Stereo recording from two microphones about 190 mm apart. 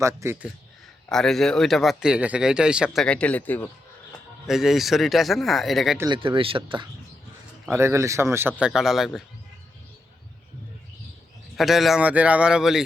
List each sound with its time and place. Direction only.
0.0 s speech: 15° right (ahead or behind)
1.1 s speech: centre (ahead or behind)
4.4 s speech: centre (ahead or behind)
6.1 s speech: 25° right (ahead or behind)
7.7 s speech: 15° right (ahead or behind)
8.6 s speech: centre (ahead or behind)
11.5 s speech: centre (ahead or behind)